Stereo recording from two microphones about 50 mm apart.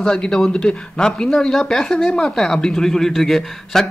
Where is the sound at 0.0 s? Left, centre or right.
Centre.